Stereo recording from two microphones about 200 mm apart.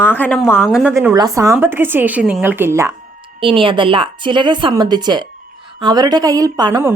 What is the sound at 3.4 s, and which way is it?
A woman's voice, 25° right (ahead or behind).